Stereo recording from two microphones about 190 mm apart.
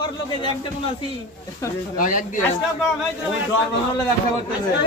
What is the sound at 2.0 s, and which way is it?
Speech, 45° left (ahead or behind).